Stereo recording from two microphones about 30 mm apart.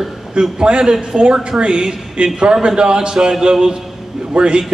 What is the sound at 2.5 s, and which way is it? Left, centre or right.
A man's voice, right.